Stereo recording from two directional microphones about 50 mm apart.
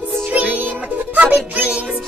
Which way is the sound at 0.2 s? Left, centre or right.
Right.